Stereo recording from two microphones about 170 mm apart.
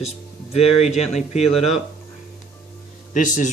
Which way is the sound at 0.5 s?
40° left (ahead or behind).